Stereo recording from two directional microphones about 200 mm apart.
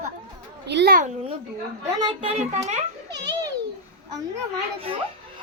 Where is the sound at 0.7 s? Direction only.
60° right (ahead or behind).